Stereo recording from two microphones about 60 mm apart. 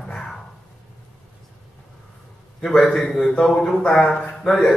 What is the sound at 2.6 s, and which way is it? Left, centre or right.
A man's voice, centre.